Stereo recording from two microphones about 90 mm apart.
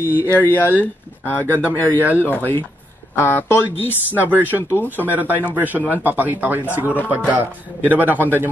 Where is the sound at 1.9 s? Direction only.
20° right (ahead or behind).